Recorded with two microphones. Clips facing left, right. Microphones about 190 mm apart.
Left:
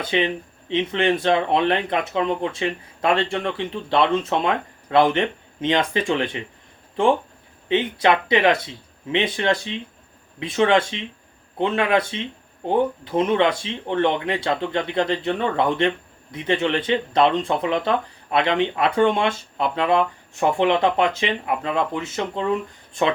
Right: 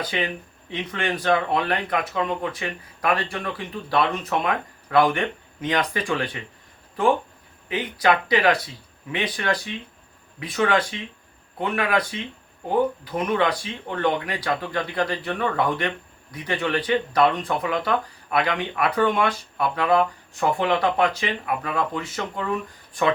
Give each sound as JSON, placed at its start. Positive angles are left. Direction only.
{"t": 0.0, "sound": "speech", "side_deg": 25}
{"t": 7.7, "sound": "speech", "side_deg": 25}